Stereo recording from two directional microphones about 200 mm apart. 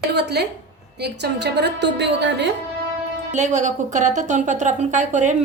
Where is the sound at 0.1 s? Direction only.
55° right (ahead or behind).